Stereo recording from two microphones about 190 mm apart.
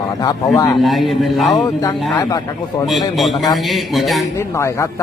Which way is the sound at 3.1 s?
Centre (ahead or behind).